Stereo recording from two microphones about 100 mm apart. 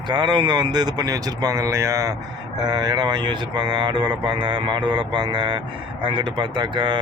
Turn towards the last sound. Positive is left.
turn(degrees=-50)  # may be behind; listen again after turning